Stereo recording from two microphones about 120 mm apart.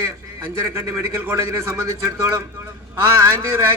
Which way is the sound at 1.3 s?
25° right (ahead or behind).